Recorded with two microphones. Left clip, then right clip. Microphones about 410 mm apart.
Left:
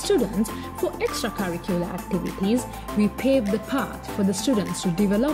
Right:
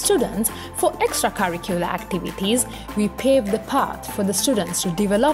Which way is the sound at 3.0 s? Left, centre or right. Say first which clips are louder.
Right 4 dB; centre.